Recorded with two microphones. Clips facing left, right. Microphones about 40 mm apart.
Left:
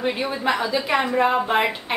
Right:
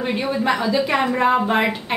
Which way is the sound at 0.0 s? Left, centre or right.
Centre.